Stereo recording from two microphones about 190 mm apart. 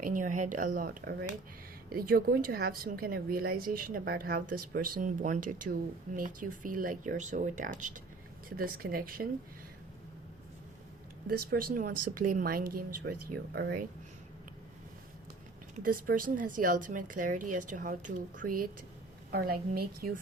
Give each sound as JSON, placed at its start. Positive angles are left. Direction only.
{"t": 0.0, "sound": "a woman's voice", "side_deg": -45}
{"t": 11.3, "sound": "a woman's voice", "side_deg": -50}
{"t": 15.8, "sound": "a woman's voice", "side_deg": -50}